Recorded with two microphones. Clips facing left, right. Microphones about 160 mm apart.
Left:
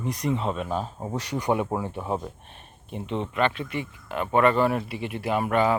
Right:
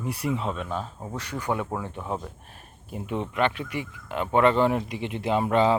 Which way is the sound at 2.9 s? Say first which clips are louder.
Even; 10° right (ahead or behind).